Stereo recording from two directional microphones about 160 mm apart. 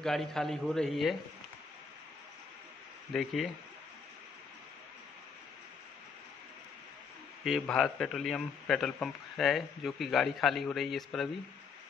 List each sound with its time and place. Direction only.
0.0 s a man's voice: centre (ahead or behind)
3.1 s a man's voice: 5° left (ahead or behind)
7.4 s a man's voice: centre (ahead or behind)